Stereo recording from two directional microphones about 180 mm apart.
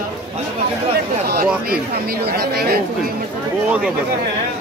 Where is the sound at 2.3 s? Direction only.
60° right (ahead or behind).